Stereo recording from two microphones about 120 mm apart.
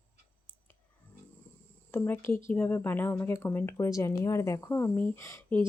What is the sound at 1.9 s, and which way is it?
A woman's voice, 15° left (ahead or behind).